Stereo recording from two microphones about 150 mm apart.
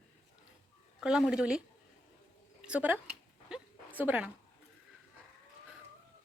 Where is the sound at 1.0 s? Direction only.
5° right (ahead or behind).